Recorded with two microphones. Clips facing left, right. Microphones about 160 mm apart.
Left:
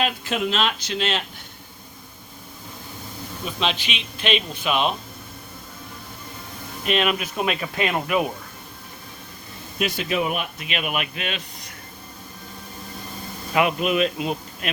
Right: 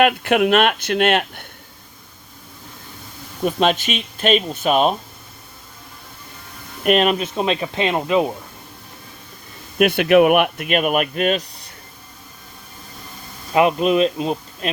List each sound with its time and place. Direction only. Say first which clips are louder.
0.0 s speech: right 9 dB; 60° right (ahead or behind)
3.4 s speech: right 9 dB; 50° right (ahead or behind)
6.8 s speech: right 6 dB; 45° right (ahead or behind); by 8.3 s 25° right (ahead or behind)
9.7 s speech: right 11 dB; 60° right (ahead or behind)
10.7 s speech: right 9 dB; 45° right (ahead or behind)
13.5 s speech: right 5 dB; 30° right (ahead or behind)